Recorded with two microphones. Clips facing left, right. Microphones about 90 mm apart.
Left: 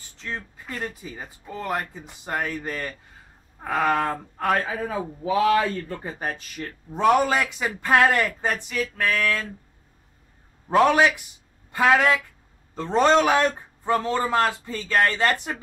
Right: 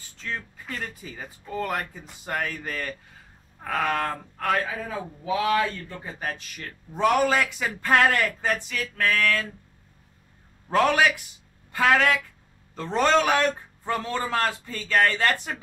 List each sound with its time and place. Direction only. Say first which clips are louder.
0.7 s speech: left 3 dB; 5° left (ahead or behind)
2.5 s speech: left 2 dB; 5° left (ahead or behind); by 4.7 s 20° left (ahead or behind)
4.8 s speech: left 4 dB; 35° left (ahead or behind)
6.9 s speech: left 2 dB; 20° left (ahead or behind)
8.8 s speech: right 1 dB; 5° left (ahead or behind)
9.1 s speech: right 1 dB; 15° left (ahead or behind)
10.7 s speech: left 3 dB; 15° left (ahead or behind)